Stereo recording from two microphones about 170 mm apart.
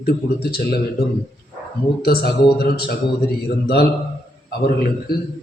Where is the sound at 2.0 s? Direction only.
65° left (ahead or behind).